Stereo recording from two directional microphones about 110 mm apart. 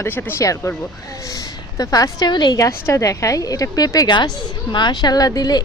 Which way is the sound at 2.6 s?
25° left (ahead or behind).